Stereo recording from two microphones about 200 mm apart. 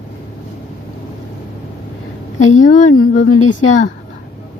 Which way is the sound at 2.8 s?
90° left.